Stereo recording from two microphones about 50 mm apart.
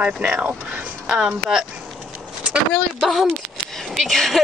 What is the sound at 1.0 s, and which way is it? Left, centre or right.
Speech, centre.